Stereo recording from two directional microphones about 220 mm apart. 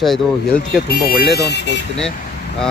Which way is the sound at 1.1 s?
45° left (ahead or behind).